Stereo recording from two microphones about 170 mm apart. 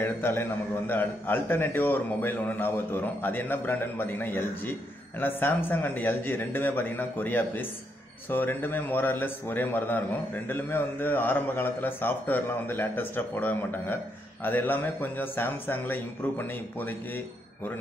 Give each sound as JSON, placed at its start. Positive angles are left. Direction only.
{"t": 0.0, "sound": "a man's voice", "side_deg": 15}